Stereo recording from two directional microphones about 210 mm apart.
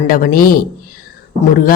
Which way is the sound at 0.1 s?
40° left (ahead or behind).